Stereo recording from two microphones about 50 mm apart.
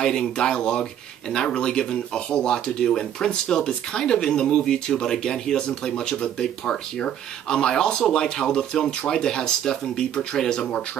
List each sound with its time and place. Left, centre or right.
0.0 s speech: centre